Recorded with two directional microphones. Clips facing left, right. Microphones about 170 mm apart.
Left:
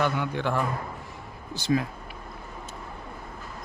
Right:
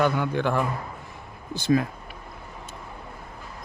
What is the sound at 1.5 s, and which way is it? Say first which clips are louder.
Speech: right 3 dB; 55° right (ahead or behind).